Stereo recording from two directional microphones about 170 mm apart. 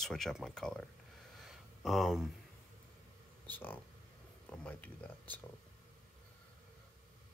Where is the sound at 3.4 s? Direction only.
10° left (ahead or behind).